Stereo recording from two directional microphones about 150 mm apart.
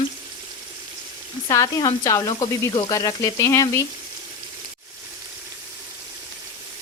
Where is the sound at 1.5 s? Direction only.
25° left (ahead or behind).